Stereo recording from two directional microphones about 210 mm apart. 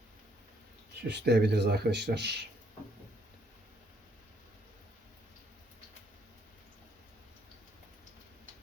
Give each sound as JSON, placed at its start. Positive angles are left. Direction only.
{"t": 1.0, "sound": "speech", "side_deg": -55}